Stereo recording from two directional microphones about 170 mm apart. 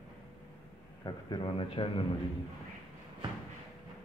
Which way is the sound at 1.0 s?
25° left (ahead or behind).